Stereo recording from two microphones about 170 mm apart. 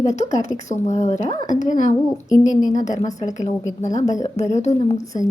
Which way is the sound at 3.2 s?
45° left (ahead or behind).